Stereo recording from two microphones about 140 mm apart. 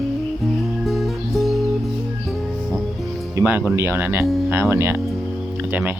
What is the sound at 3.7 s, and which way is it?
Speech, 15° right (ahead or behind).